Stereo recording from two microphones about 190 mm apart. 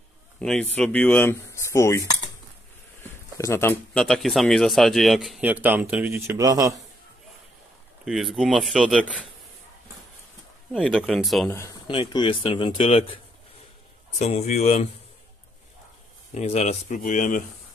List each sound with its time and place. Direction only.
0.4 s a man's voice: 5° left (ahead or behind); by 6.8 s 20° right (ahead or behind)
8.0 s speech: centre (ahead or behind)
10.8 s speech: centre (ahead or behind)
11.9 s speech: 25° left (ahead or behind)
14.1 s speech: 35° left (ahead or behind)
16.3 s speech: 35° left (ahead or behind)